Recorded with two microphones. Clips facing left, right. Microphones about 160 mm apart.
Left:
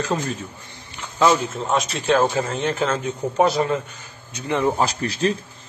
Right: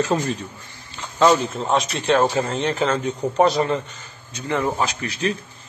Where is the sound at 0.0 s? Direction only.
Centre (ahead or behind).